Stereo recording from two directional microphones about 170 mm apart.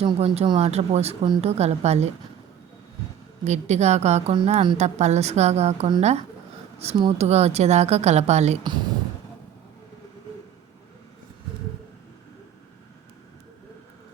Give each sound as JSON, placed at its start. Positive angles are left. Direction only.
{"t": 0.0, "sound": "a woman's voice", "side_deg": -35}
{"t": 3.4, "sound": "a woman's voice", "side_deg": -40}